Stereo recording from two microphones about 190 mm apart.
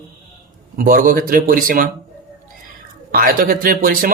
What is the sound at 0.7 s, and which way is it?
Speech, 45° right (ahead or behind).